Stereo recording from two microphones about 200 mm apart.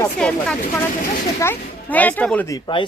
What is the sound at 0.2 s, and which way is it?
Speech, 5° left (ahead or behind).